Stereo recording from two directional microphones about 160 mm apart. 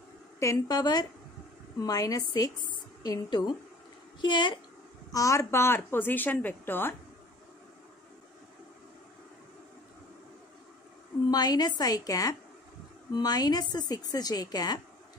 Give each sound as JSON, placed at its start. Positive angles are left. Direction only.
{"t": 0.4, "sound": "a woman's voice", "side_deg": 20}
{"t": 11.2, "sound": "a woman's voice", "side_deg": 25}